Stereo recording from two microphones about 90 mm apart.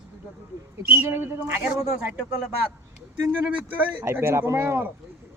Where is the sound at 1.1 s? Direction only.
25° right (ahead or behind).